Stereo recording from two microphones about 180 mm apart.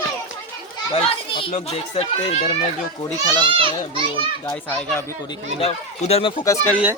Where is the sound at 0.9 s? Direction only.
30° left (ahead or behind).